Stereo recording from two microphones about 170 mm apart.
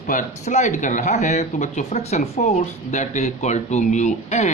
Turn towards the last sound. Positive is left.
turn(degrees=45)  # may be behind; listen again after turning